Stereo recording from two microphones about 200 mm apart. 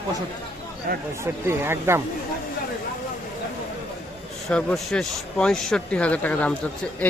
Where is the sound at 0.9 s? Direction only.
45° right (ahead or behind).